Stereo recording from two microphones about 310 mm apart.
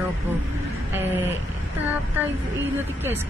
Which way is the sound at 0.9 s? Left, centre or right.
Centre.